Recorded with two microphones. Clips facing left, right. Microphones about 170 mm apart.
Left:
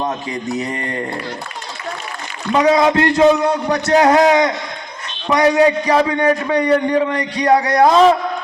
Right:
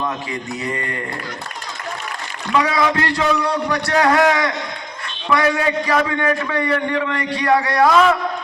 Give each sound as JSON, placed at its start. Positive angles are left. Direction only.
{"t": 2.5, "sound": "a man's voice", "side_deg": 20}
{"t": 7.6, "sound": "a man's voice", "side_deg": 40}
{"t": 7.9, "sound": "a man's voice", "side_deg": 30}